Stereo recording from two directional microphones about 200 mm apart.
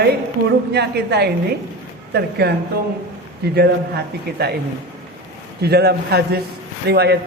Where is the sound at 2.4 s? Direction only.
55° right (ahead or behind).